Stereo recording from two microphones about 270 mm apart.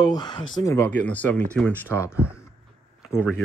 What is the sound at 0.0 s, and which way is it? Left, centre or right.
Speech, centre.